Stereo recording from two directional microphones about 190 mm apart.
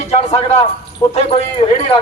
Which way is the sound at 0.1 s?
35° left (ahead or behind).